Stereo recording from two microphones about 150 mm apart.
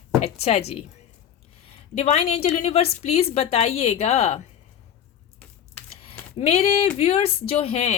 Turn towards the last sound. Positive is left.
turn(degrees=45)  # may be behind; listen again after turning